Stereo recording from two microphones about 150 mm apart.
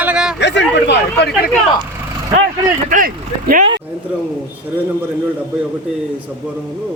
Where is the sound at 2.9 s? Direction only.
65° right (ahead or behind).